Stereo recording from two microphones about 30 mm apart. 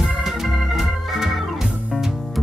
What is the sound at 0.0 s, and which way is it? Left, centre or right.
Organ, centre.